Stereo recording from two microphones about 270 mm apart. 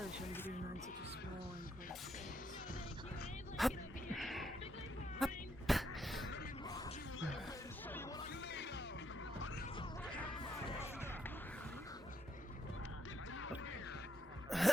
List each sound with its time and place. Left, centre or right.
0.0 s a sound: centre
3.6 s a sound: centre
6.7 s music: centre
8.3 s music: left
10.7 s music: centre
14.5 s music: centre